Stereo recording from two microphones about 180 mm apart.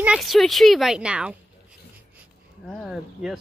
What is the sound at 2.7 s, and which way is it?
Speech, centre (ahead or behind).